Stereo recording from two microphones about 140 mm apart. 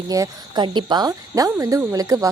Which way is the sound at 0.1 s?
30° right (ahead or behind).